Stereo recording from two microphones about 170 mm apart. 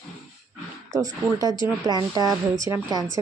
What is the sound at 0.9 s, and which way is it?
Speech, 20° right (ahead or behind).